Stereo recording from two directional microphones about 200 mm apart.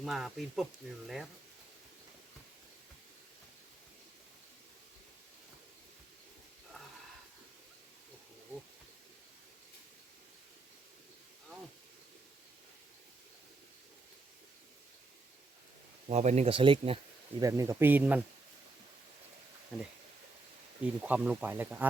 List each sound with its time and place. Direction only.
0.0 s speech: centre (ahead or behind)
16.0 s speech: 35° right (ahead or behind)
17.4 s speech: 15° right (ahead or behind)
20.8 s speech: 5° right (ahead or behind)